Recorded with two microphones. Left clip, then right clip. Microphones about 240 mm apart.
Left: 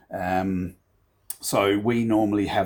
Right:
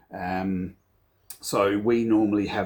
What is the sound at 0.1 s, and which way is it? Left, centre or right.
Speech, left.